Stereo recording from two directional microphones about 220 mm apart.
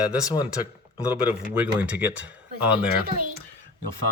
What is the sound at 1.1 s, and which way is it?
Speech, 5° right (ahead or behind).